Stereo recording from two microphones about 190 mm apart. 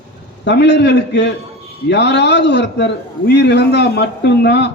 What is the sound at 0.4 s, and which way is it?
A man's voice, 65° left (ahead or behind).